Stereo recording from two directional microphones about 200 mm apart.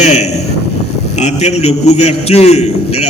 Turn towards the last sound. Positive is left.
turn(degrees=30)  # may be behind; listen again after turning